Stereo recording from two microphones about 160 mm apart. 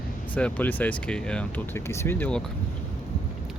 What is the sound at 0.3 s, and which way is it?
Speech, 10° left (ahead or behind).